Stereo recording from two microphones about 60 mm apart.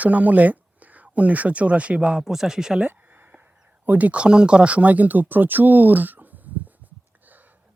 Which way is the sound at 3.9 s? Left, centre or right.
Right.